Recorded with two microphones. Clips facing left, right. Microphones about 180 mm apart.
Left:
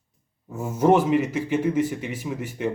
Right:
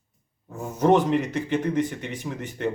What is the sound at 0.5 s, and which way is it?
A man's voice, 10° left (ahead or behind).